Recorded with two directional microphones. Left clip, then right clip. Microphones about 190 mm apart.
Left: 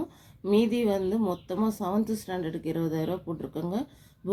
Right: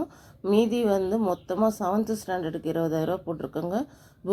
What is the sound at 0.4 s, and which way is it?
Speech, 10° right (ahead or behind).